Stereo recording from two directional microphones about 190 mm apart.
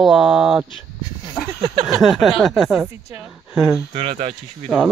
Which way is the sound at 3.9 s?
35° right (ahead or behind).